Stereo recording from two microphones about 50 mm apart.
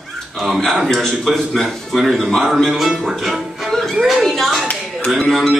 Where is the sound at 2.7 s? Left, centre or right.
Centre.